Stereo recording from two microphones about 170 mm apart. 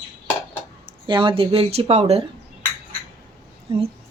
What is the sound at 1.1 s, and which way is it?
A woman's voice, 30° right (ahead or behind).